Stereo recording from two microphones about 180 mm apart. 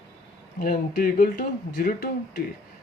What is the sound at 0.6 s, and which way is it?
Speech, 55° left (ahead or behind).